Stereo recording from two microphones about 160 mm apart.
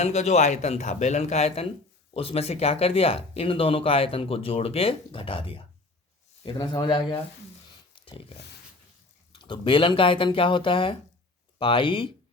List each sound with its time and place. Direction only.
0.0 s speech: 45° left (ahead or behind); by 7.2 s 25° left (ahead or behind)
7.9 s a sound: 30° left (ahead or behind)
9.3 s speech: 30° left (ahead or behind)